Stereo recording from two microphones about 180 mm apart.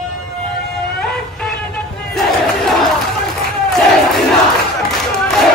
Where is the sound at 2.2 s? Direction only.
Centre (ahead or behind).